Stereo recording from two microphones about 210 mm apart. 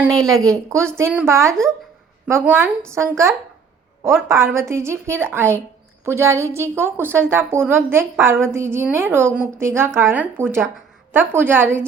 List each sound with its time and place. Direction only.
0.0 s a woman's voice: 15° right (ahead or behind)